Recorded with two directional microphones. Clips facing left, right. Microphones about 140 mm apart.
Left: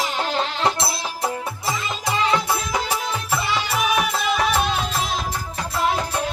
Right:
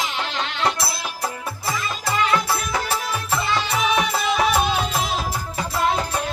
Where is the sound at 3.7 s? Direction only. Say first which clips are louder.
Left 1 dB; centre (ahead or behind).